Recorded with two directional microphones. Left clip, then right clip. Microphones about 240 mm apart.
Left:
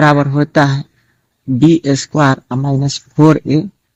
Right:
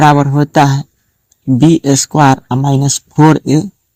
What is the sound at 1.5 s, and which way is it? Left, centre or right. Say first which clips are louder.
Speech: right 1 dB; right.